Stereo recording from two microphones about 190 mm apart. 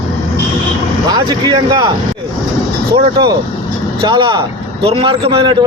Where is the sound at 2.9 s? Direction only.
20° right (ahead or behind).